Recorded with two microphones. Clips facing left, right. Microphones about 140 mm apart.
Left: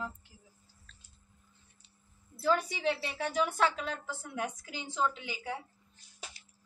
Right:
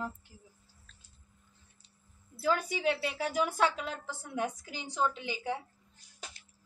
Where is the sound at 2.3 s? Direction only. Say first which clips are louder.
Left 1 dB; 5° right (ahead or behind).